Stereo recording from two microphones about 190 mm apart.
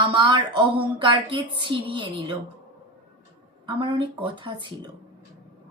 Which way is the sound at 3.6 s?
25° right (ahead or behind).